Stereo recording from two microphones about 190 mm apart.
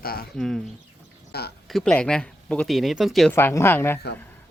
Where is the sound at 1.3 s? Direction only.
55° left (ahead or behind).